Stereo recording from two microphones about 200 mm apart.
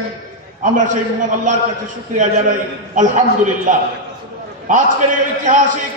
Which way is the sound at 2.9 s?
40° right (ahead or behind).